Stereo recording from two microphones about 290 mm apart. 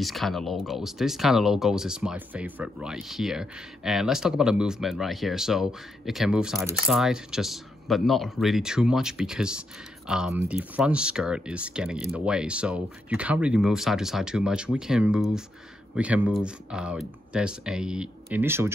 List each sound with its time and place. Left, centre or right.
0.0 s speech: centre